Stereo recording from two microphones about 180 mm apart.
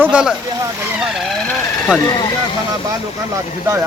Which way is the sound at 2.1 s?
25° left (ahead or behind).